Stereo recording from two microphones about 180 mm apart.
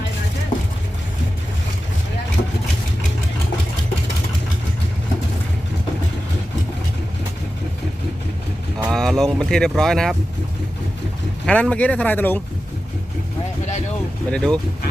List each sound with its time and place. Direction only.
8.9 s speech: centre (ahead or behind)
11.4 s speech: 5° left (ahead or behind)
14.3 s speech: 5° left (ahead or behind)